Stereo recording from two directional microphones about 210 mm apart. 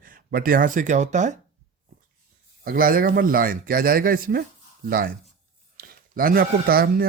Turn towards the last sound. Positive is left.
turn(degrees=-45)  # may be behind; listen again after turning